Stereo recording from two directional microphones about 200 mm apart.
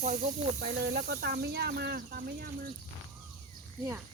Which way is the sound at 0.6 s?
55° right (ahead or behind).